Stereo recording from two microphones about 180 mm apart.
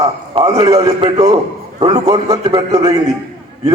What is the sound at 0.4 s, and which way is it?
A man's voice, 30° right (ahead or behind).